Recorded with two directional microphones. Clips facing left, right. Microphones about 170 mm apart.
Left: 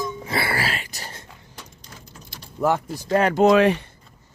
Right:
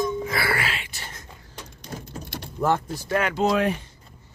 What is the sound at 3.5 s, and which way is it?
Speech, 90° left.